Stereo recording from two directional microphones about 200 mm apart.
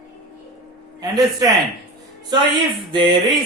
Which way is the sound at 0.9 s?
20° right (ahead or behind).